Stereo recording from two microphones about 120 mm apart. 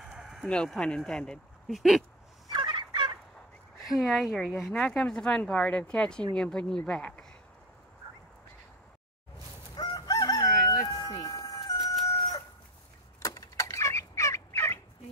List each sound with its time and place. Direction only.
0.0 s speech: centre (ahead or behind)
2.5 s fowl: 40° right (ahead or behind)
3.8 s speech: centre (ahead or behind)
9.8 s chicken: 30° left (ahead or behind)
10.9 s a sound: 30° left (ahead or behind)
12.1 s chicken: 30° left (ahead or behind)
13.2 s fowl: 30° left (ahead or behind)